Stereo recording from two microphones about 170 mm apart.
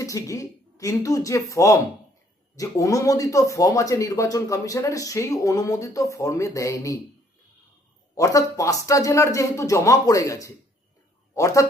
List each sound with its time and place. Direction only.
0.0 s speech: 20° left (ahead or behind)
8.1 s speech: 20° left (ahead or behind)